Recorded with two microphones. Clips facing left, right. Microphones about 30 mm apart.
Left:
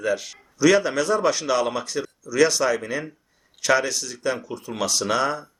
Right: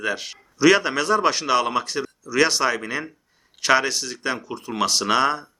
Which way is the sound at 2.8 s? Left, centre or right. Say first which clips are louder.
Even; right.